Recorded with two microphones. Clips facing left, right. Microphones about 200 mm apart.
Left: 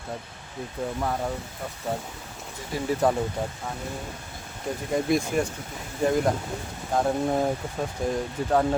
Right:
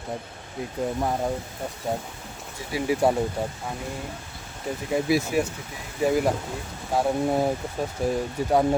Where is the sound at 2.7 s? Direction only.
10° right (ahead or behind).